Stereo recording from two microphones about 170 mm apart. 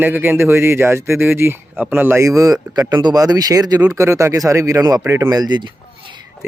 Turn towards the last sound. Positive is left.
turn(degrees=-25)  # may be behind; listen again after turning